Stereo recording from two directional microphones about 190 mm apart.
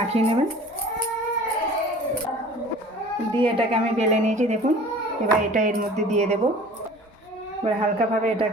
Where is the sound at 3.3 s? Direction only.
30° right (ahead or behind).